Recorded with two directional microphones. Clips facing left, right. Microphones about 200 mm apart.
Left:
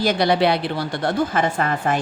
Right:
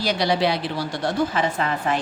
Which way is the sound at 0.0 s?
55° left (ahead or behind).